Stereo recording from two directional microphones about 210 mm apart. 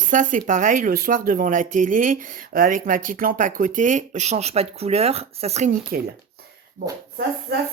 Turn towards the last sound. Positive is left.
turn(degrees=-50)  # may be behind; listen again after turning